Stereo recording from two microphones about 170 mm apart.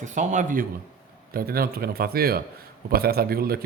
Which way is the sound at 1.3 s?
60° right (ahead or behind).